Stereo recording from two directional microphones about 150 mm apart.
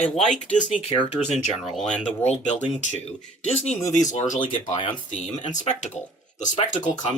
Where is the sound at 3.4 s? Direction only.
45° left (ahead or behind).